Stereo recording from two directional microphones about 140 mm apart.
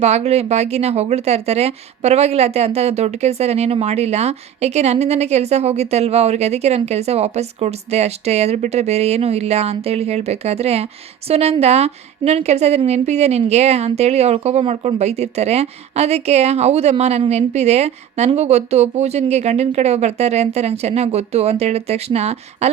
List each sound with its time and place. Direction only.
0.0 s speech: 50° right (ahead or behind)